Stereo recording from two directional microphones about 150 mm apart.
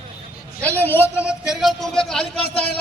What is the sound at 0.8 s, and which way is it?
Speech, 15° left (ahead or behind).